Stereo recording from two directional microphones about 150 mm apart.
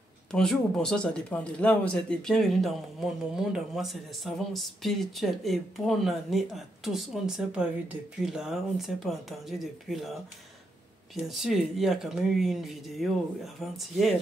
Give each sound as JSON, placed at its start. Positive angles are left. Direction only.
{"t": 0.3, "sound": "speech", "side_deg": 5}
{"t": 11.2, "sound": "speech", "side_deg": 0}